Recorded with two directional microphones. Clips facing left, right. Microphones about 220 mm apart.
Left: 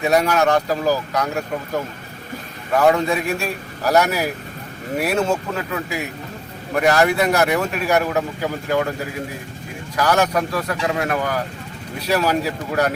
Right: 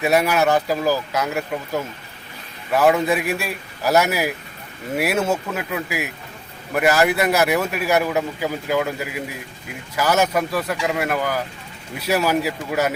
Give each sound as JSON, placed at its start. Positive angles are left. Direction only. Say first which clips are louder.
{"t": 0.0, "sound": "a man's voice", "louder": "left 1 dB", "side_deg": -5}